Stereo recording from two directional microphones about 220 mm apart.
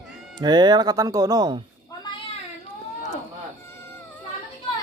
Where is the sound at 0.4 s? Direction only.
20° right (ahead or behind).